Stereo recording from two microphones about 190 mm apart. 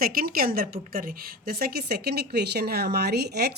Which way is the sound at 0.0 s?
50° right (ahead or behind).